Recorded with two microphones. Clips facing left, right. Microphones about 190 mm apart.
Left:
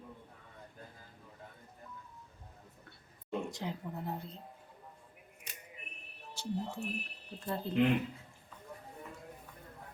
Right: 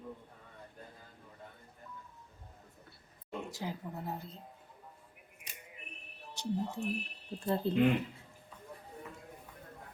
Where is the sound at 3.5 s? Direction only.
5° right (ahead or behind).